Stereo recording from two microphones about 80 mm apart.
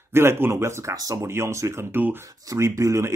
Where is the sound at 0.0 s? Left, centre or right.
Right.